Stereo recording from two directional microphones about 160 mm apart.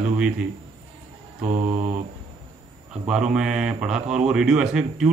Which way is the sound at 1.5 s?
50° right (ahead or behind).